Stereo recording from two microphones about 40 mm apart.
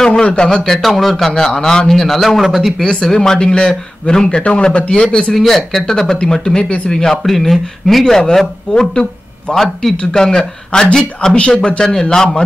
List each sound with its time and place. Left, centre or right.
0.0 s speech: centre
0.7 s speech: centre
1.3 s speech: centre
2.8 s speech: centre
5.3 s speech: centre
8.0 s speech: centre
8.7 s speech: left
9.6 s speech: centre
11.9 s speech: centre